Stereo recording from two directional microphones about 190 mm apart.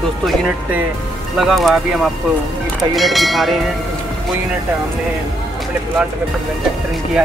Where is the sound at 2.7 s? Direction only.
Centre (ahead or behind).